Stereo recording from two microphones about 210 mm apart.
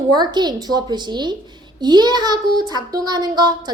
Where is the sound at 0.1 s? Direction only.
20° right (ahead or behind).